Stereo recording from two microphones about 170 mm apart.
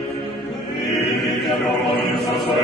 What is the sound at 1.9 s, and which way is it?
Chant, 75° left (ahead or behind).